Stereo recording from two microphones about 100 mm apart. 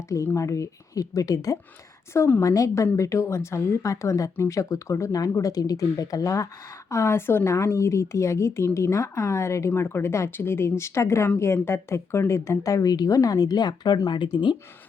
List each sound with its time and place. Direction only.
0.3 s a woman's voice: 30° left (ahead or behind)
2.1 s a woman's voice: 20° left (ahead or behind)
2.4 s a woman's voice: 35° left (ahead or behind)